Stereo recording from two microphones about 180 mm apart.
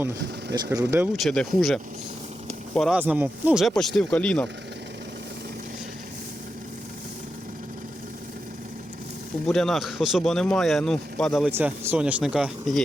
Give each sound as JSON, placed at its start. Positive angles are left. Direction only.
{"t": 0.5, "sound": "speech", "side_deg": -20}
{"t": 1.1, "sound": "speech", "side_deg": 0}
{"t": 3.0, "sound": "speech", "side_deg": -10}
{"t": 9.5, "sound": "speech", "side_deg": 0}
{"t": 11.5, "sound": "speech", "side_deg": -10}